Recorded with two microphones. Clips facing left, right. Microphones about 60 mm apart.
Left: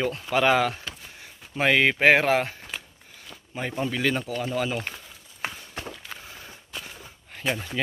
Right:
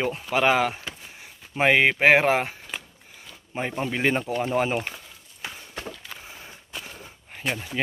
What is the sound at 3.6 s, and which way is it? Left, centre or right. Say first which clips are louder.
Speech: right 1 dB; right.